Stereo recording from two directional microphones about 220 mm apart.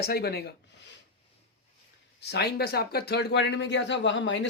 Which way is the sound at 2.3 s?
45° left (ahead or behind).